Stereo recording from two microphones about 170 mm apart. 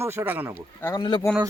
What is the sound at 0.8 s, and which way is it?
Speech, 15° left (ahead or behind).